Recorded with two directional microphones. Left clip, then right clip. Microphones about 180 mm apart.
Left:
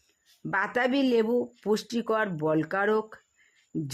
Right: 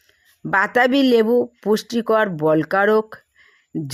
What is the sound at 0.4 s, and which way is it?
Speech, 25° right (ahead or behind).